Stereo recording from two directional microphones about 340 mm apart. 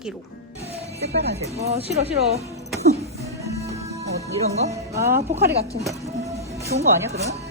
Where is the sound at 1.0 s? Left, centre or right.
Centre.